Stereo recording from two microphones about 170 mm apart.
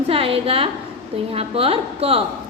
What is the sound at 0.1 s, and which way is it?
A woman's voice, 35° right (ahead or behind).